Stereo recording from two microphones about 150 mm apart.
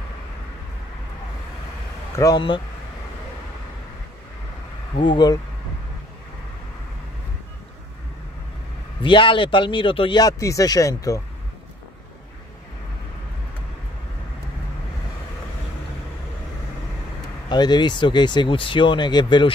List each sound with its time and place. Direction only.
2.1 s speech: 25° left (ahead or behind)
4.9 s speech: 30° left (ahead or behind)
9.0 s speech: 35° left (ahead or behind)
17.5 s speech: 30° left (ahead or behind)